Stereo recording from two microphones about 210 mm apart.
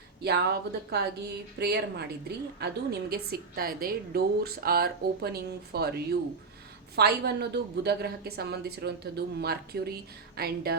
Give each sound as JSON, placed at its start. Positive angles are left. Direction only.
{"t": 0.2, "sound": "a woman's voice", "side_deg": -50}